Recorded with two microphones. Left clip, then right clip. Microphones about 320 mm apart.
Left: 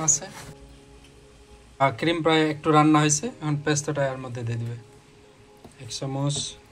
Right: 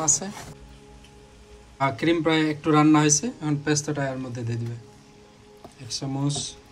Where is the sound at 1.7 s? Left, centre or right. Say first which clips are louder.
Even; centre.